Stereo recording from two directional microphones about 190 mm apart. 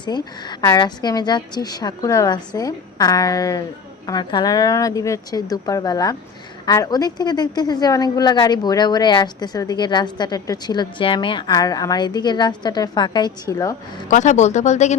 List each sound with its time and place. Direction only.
0.0 s a woman's voice: 20° left (ahead or behind)
14.1 s speech: 40° left (ahead or behind)